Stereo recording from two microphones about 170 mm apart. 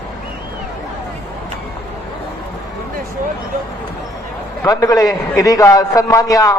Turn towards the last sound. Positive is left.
turn(degrees=20)  # may be behind; listen again after turning